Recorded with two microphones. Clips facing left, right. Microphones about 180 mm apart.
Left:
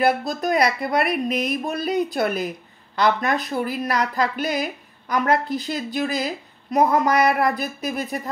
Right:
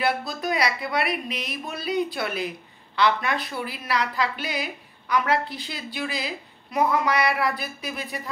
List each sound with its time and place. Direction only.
0.0 s speech: 45° left (ahead or behind)